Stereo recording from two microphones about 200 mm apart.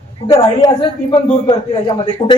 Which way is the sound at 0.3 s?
20° left (ahead or behind).